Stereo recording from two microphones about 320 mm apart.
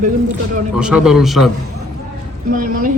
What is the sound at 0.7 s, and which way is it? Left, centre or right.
Speech, centre.